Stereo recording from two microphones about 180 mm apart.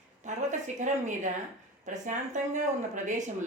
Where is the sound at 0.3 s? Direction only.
40° right (ahead or behind).